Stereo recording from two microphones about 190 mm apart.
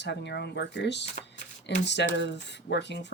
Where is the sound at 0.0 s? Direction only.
65° left (ahead or behind).